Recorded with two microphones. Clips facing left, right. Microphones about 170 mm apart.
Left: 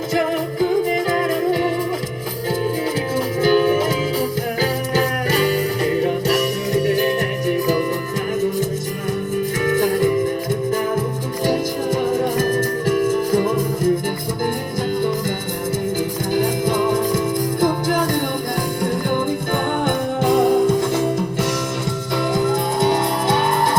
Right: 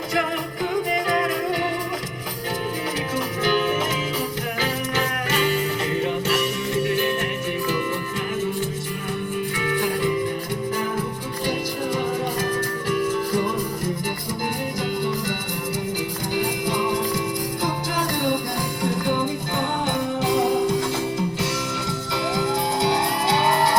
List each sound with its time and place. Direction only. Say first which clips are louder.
0.1 s music: left 6 dB; 30° left (ahead or behind)
3.4 s music: left 7 dB; 35° left (ahead or behind)
9.6 s music: left 7 dB; 45° left (ahead or behind)
12.4 s music: left 6 dB; 45° left (ahead or behind)
16.3 s music: left 5 dB; 50° left (ahead or behind)
19.8 s music: left 4 dB; 50° left (ahead or behind)
22.3 s music: left 4 dB; 50° left (ahead or behind)